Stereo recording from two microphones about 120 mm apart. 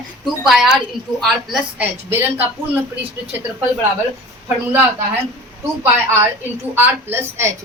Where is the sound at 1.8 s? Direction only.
20° right (ahead or behind).